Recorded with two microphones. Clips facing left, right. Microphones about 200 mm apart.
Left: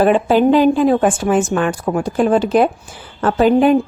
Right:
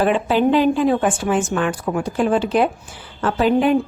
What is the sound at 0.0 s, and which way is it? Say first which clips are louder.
A woman's voice: left 4 dB; 45° left (ahead or behind).